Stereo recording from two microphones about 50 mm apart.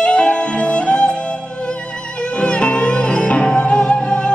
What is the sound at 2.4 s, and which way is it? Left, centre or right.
Music, left.